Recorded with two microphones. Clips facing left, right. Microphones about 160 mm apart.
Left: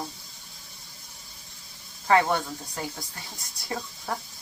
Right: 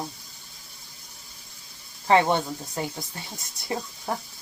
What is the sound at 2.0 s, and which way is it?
Speech, 25° right (ahead or behind).